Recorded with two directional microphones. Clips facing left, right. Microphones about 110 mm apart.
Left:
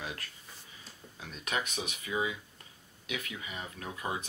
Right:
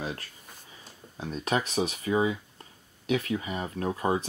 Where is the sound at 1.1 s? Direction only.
35° right (ahead or behind).